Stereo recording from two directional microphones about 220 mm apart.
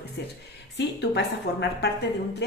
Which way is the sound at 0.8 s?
50° left (ahead or behind).